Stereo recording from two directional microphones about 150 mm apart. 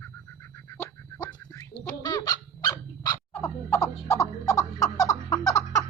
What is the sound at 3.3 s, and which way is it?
Fowl, 15° left (ahead or behind).